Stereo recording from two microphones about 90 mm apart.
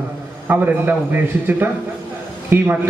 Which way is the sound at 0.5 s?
20° right (ahead or behind).